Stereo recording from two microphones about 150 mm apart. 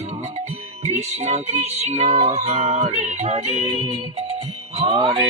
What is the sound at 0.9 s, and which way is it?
Music, 45° right (ahead or behind).